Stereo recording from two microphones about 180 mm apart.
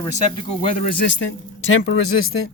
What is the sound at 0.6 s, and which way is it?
Speech, 45° left (ahead or behind).